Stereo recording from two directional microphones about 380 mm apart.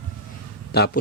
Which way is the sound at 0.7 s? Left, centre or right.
Left.